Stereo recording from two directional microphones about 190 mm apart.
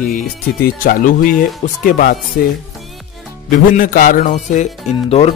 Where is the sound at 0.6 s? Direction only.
45° left (ahead or behind).